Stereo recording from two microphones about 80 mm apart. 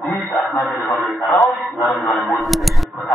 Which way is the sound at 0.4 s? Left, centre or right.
Centre.